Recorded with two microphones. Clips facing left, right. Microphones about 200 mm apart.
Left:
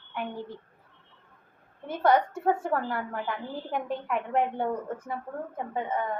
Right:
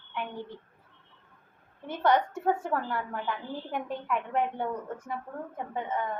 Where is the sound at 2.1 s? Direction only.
40° left (ahead or behind).